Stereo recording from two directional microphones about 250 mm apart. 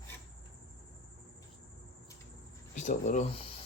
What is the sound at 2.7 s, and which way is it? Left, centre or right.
Speech, left.